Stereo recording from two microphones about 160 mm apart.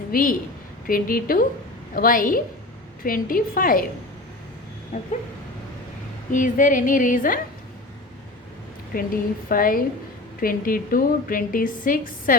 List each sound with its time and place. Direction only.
0.1 s a woman's voice: 65° left (ahead or behind)
4.9 s a woman's voice: 60° left (ahead or behind)
6.3 s a woman's voice: 55° left (ahead or behind)
8.9 s a woman's voice: 65° left (ahead or behind)